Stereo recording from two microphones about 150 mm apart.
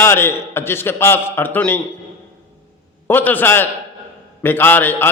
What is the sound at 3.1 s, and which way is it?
A man's voice, 10° left (ahead or behind).